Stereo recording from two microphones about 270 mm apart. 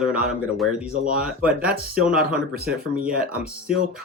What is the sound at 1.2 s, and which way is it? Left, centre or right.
Speech, centre.